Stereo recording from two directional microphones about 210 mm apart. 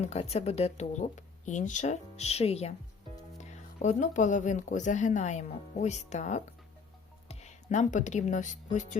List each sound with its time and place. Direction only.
0.0 s speech: 30° left (ahead or behind)